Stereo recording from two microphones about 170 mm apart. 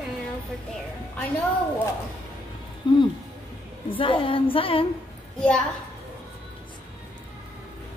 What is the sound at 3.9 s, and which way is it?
Speech, 30° left (ahead or behind).